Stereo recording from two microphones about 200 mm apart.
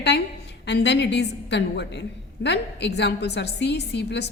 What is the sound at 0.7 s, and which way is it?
A woman's voice, 60° left (ahead or behind).